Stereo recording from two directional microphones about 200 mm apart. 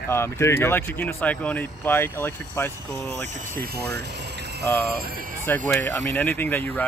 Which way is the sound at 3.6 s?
55° right (ahead or behind).